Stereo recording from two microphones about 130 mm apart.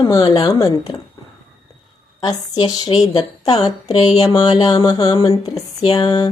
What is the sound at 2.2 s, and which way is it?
A woman's voice, 35° left (ahead or behind).